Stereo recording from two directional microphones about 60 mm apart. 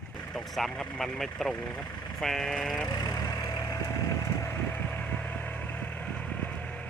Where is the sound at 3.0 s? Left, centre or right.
Left.